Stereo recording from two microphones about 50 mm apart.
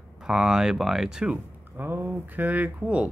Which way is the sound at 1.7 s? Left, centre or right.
Right.